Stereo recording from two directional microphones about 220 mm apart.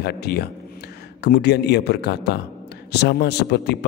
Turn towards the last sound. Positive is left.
turn(degrees=50)  # may be behind; listen again after turning